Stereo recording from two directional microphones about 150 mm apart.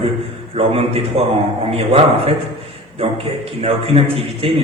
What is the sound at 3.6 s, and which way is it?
A man's voice, 40° right (ahead or behind).